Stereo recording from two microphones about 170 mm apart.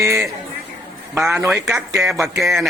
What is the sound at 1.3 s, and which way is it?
Speech, 15° right (ahead or behind).